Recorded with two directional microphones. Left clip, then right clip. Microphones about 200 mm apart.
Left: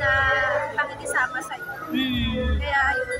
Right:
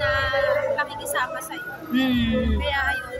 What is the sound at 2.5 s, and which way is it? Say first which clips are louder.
Music: left 5 dB; 5° right (ahead or behind).